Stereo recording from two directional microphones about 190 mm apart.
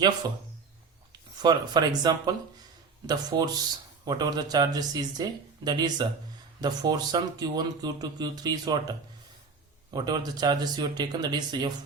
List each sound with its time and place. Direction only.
0.2 s speech: 20° right (ahead or behind)